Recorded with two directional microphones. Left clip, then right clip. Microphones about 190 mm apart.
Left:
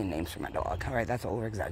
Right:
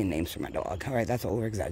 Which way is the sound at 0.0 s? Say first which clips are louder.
Right 3 dB; 55° right (ahead or behind).